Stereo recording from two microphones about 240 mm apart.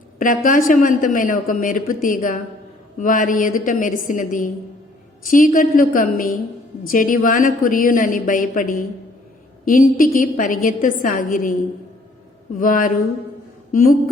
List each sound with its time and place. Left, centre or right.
0.2 s a woman's voice: left
12.5 s a woman's voice: left